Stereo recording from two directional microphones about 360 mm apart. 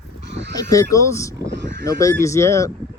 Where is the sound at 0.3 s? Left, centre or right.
Right.